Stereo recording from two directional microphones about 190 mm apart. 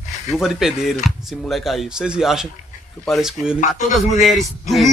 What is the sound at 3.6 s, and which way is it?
Speech, 40° left (ahead or behind).